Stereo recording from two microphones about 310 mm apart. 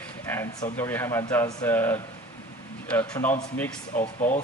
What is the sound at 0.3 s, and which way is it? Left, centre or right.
Speech, centre.